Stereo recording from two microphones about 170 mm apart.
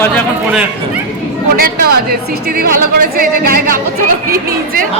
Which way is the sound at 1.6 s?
65° right (ahead or behind).